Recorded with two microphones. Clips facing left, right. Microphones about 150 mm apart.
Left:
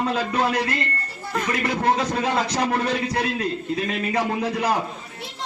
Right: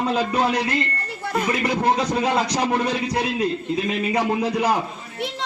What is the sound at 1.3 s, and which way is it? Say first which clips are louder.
Speech: right 2 dB; 15° right (ahead or behind).